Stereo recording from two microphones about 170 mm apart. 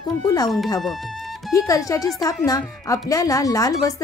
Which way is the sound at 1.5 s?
20° left (ahead or behind).